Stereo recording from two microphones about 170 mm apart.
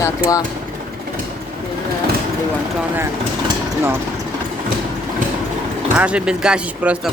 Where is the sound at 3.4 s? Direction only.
15° right (ahead or behind).